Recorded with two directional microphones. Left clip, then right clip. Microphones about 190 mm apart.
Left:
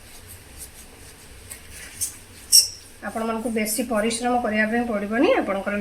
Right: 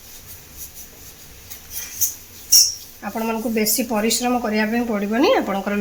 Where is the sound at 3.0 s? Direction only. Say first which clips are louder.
Right 2 dB; 50° right (ahead or behind).